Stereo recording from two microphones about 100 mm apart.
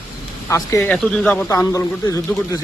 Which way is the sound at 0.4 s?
30° left (ahead or behind).